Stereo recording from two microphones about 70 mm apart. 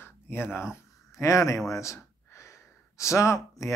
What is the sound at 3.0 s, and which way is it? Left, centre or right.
Speech, left.